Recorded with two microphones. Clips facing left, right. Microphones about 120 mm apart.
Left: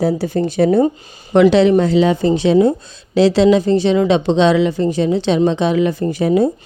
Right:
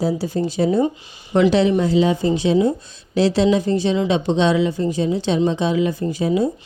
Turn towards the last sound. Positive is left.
turn(degrees=65)  # may be behind; listen again after turning